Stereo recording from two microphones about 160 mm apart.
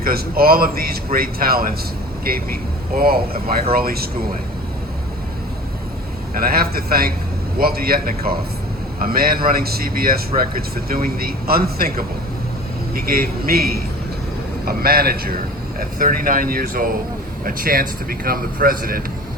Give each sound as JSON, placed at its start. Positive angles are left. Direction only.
{"t": 0.0, "sound": "a man's voice", "side_deg": -70}
{"t": 6.3, "sound": "a man's voice", "side_deg": -70}